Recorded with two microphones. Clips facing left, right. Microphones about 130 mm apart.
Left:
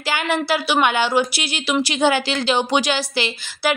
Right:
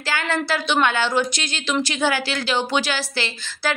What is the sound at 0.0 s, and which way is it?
A woman's voice, 15° left (ahead or behind).